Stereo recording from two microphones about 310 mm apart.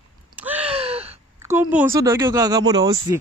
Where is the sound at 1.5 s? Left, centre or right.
Centre.